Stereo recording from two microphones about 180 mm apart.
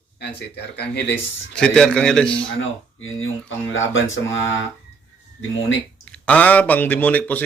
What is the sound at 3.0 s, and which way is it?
Speech, 90° left.